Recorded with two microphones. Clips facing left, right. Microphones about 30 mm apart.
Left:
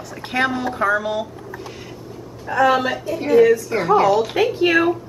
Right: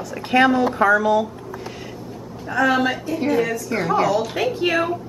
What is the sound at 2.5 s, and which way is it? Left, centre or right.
A woman's voice, centre.